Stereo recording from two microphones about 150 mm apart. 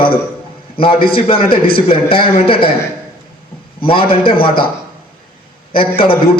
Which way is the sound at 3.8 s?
35° left (ahead or behind).